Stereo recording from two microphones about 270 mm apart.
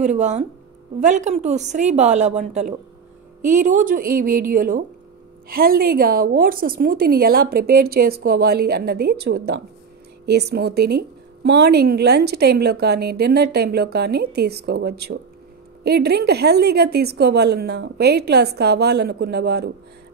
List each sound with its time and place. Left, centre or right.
0.0 s a woman's voice: right